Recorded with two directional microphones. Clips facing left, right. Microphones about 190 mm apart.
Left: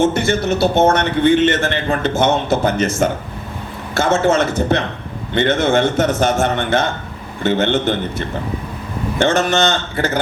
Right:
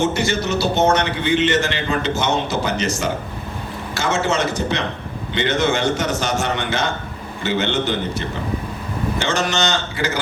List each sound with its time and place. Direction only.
0.0 s a man's voice: 55° left (ahead or behind)
9.1 s a man's voice: 55° left (ahead or behind)